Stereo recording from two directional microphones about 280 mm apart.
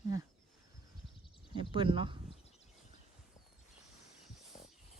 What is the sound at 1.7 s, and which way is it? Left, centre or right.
Speech, centre.